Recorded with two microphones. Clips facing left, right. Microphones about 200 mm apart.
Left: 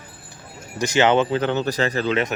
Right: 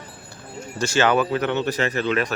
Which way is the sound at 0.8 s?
20° left (ahead or behind).